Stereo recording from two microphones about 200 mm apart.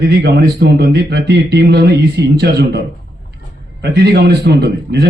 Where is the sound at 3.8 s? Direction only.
50° right (ahead or behind).